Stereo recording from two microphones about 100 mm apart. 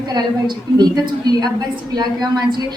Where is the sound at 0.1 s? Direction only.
45° right (ahead or behind).